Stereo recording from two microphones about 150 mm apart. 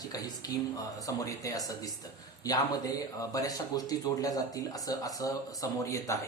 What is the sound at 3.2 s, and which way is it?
Speech, 25° left (ahead or behind).